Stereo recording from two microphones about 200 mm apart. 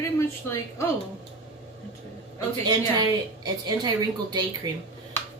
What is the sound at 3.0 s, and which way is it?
A woman's voice, 20° right (ahead or behind).